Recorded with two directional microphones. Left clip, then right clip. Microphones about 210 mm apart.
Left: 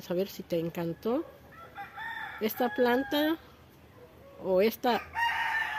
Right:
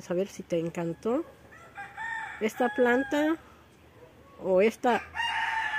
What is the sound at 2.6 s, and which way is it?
Speech, 10° right (ahead or behind).